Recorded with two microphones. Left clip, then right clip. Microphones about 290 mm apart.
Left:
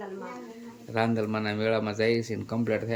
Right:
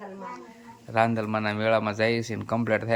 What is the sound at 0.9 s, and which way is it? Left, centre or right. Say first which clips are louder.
Speech: right 4 dB; centre.